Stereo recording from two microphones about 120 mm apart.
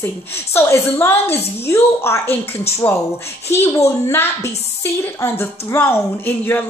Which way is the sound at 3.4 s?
20° left (ahead or behind).